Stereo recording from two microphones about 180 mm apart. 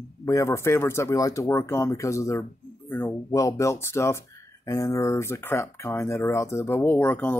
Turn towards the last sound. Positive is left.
turn(degrees=10)  # may be behind; listen again after turning